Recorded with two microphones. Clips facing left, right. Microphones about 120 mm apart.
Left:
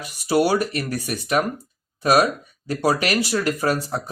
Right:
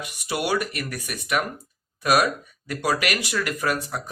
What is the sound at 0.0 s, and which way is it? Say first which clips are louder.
Speech: left 8 dB; 35° left (ahead or behind).